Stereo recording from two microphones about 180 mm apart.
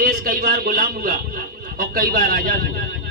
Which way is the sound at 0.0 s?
50° right (ahead or behind).